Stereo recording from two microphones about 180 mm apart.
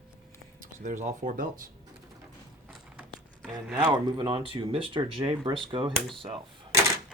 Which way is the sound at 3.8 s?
25° right (ahead or behind).